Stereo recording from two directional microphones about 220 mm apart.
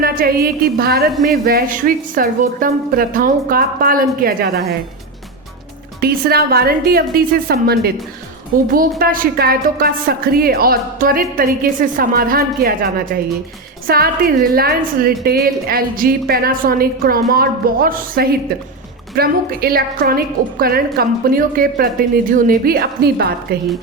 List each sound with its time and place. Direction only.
0.0 s a woman's voice: 45° right (ahead or behind)
6.0 s a woman's voice: 45° right (ahead or behind)